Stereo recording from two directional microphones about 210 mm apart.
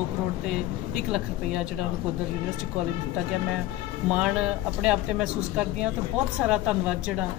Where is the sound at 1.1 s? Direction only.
5° right (ahead or behind).